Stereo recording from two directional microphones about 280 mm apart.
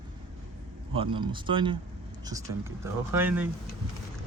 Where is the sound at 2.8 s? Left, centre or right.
Centre.